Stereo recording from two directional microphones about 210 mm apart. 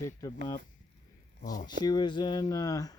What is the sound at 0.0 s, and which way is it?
Speech, 15° left (ahead or behind).